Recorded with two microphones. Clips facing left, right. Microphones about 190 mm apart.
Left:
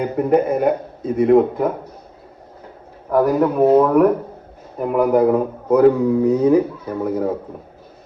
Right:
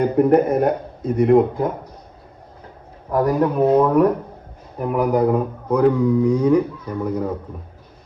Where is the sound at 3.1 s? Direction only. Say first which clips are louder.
Left 2 dB; 5° left (ahead or behind).